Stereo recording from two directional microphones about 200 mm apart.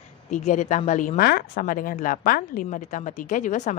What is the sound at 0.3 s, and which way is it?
A woman's voice, 35° left (ahead or behind).